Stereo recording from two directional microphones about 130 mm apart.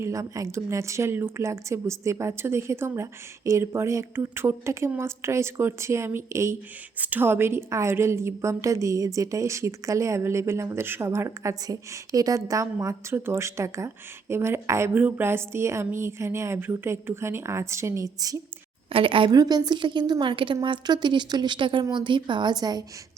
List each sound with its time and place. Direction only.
0.0 s a woman's voice: 25° right (ahead or behind)
18.9 s a woman's voice: 45° right (ahead or behind)
19.4 s a woman's voice: 30° right (ahead or behind)